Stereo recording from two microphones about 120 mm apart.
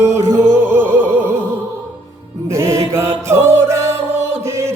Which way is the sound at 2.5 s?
25° right (ahead or behind).